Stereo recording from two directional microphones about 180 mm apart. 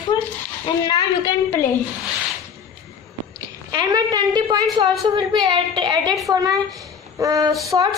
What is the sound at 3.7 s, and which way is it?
A woman's voice, 20° right (ahead or behind).